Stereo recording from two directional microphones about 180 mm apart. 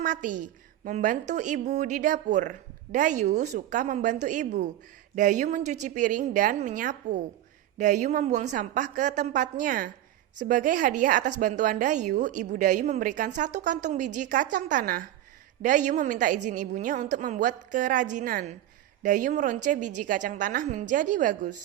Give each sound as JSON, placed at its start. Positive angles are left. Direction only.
{"t": 0.0, "sound": "a woman's voice", "side_deg": -45}